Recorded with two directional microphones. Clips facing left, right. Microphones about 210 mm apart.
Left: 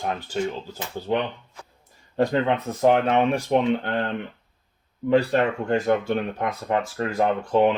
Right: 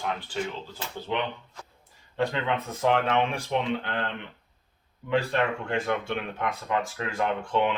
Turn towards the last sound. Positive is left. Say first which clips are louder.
# left 6 dB
turn(degrees=40)  # may be behind; listen again after turning